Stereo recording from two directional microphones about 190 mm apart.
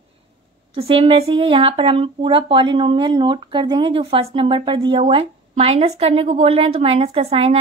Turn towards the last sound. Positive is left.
turn(degrees=-30)  # may be behind; listen again after turning